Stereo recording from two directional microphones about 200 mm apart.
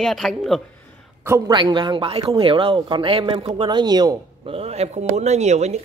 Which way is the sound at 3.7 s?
20° right (ahead or behind).